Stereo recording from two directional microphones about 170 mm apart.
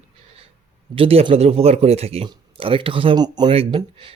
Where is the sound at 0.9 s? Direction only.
35° right (ahead or behind).